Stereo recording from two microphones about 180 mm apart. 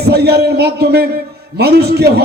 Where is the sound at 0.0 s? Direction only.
60° right (ahead or behind).